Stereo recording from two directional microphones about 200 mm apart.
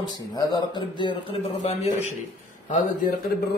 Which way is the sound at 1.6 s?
35° left (ahead or behind).